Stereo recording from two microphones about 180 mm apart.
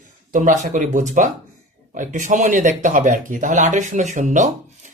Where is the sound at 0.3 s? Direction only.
45° right (ahead or behind).